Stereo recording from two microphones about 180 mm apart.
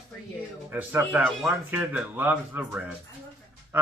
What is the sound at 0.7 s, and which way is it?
A man's voice, 10° right (ahead or behind).